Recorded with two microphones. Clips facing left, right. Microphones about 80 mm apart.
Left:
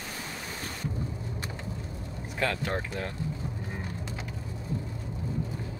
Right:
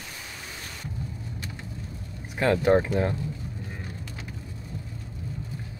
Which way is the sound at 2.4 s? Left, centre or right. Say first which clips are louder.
Right 9 dB; right.